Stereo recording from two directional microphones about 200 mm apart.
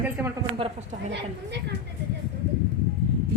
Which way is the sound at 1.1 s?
60° right (ahead or behind).